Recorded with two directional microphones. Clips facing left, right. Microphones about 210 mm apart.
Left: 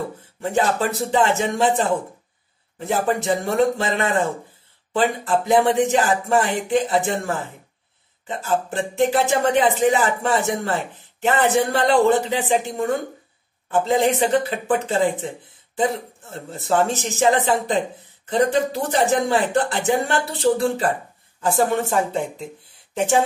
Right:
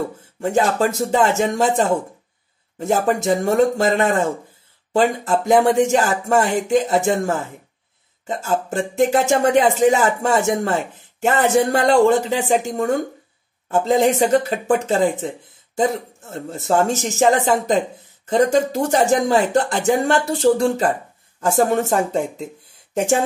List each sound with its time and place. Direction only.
0.4 s speech: 40° right (ahead or behind)